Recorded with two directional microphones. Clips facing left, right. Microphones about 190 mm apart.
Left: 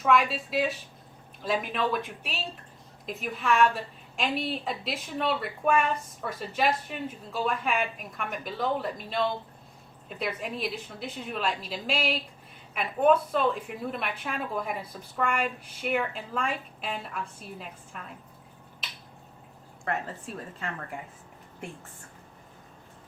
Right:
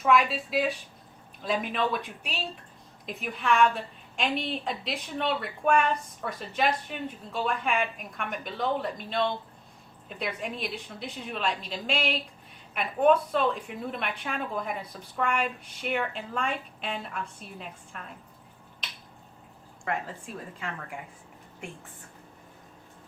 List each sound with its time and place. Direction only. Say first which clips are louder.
0.0 s a woman's voice: right 1 dB; centre (ahead or behind)
19.8 s a woman's voice: even; centre (ahead or behind)